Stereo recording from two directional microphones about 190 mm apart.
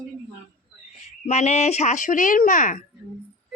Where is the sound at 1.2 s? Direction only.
35° left (ahead or behind).